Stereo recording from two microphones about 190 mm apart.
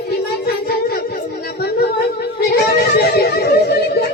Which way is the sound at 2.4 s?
55° left (ahead or behind).